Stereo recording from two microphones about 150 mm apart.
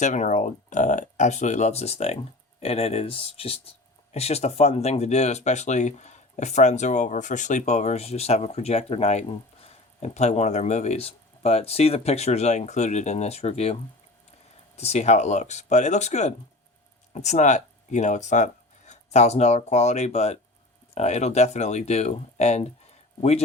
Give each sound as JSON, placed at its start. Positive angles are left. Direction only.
{"t": 0.0, "sound": "speech", "side_deg": 55}
{"t": 14.8, "sound": "speech", "side_deg": 45}